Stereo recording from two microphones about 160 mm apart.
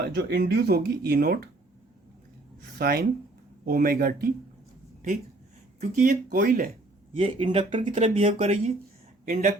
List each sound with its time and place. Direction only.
0.1 s speech: 85° right
2.7 s speech: 70° right (ahead or behind)
5.8 s speech: 60° right (ahead or behind)
7.2 s speech: 35° right (ahead or behind)
7.8 s speech: 50° right (ahead or behind)